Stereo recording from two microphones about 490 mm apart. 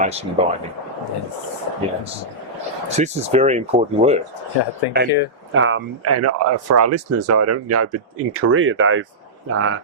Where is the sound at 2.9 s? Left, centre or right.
Centre.